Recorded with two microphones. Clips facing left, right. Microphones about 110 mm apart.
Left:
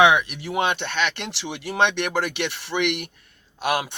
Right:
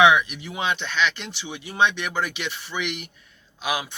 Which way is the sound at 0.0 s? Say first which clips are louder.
Even; 55° left (ahead or behind).